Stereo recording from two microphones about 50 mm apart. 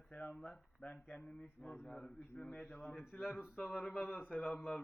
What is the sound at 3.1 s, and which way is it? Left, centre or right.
Speech, centre.